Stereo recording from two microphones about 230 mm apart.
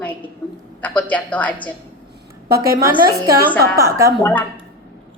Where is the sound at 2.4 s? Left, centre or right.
Right.